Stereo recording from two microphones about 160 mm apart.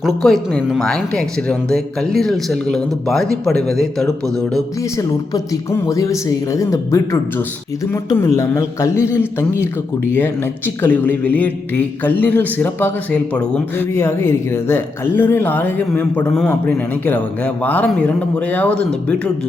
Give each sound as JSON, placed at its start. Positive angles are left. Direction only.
{"t": 0.2, "sound": "speech", "side_deg": 0}
{"t": 4.9, "sound": "speech", "side_deg": 20}
{"t": 10.8, "sound": "speech", "side_deg": 10}